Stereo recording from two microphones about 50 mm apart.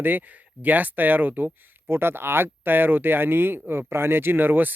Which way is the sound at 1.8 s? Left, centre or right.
Right.